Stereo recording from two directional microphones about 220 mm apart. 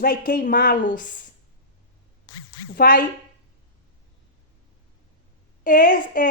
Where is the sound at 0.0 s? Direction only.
40° left (ahead or behind).